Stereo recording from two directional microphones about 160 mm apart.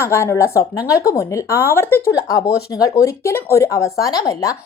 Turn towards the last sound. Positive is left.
turn(degrees=20)  # may be behind; listen again after turning